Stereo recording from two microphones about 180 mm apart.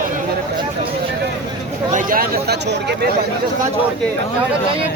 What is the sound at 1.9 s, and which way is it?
Speech, 55° right (ahead or behind).